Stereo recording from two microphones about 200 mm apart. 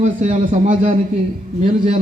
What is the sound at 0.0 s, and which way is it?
A man's voice, 35° right (ahead or behind).